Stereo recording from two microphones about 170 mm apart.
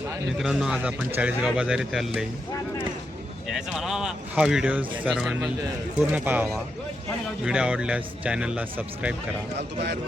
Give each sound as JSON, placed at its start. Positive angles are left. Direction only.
{"t": 0.3, "sound": "speech", "side_deg": -5}
{"t": 3.5, "sound": "speech", "side_deg": 0}
{"t": 9.6, "sound": "speech", "side_deg": -90}